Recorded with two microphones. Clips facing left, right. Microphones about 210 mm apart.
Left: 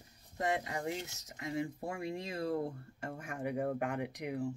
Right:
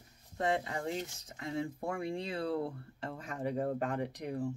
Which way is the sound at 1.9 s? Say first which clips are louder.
Right 3 dB; 70° right (ahead or behind).